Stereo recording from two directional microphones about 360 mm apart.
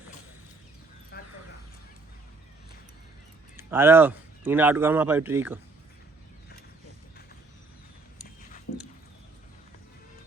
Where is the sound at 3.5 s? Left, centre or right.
Centre.